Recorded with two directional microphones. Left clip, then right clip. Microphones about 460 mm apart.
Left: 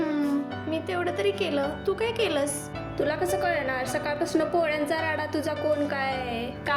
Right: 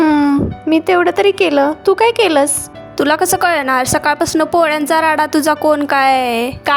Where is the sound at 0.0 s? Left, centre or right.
Centre.